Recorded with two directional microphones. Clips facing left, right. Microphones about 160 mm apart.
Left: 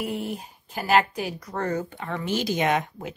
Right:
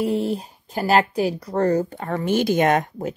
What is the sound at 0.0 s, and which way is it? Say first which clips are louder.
Speech: right 8 dB; 35° right (ahead or behind).